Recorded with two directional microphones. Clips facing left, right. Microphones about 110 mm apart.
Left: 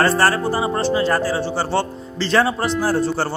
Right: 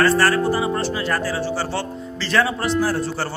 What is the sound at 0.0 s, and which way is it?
Speech, 30° left (ahead or behind).